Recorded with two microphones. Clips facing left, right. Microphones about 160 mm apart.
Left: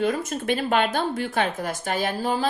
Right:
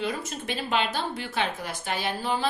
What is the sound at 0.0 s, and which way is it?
Speech, 50° left (ahead or behind).